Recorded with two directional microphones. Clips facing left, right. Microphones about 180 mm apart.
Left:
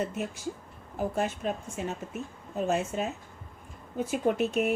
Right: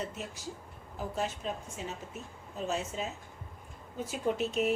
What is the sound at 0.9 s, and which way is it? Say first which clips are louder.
A woman's voice: left 5 dB; 55° left (ahead or behind).